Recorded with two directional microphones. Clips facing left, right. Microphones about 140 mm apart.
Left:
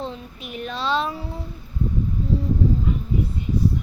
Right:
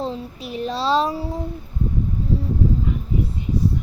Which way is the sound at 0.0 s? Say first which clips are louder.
Right 5 dB; 35° right (ahead or behind).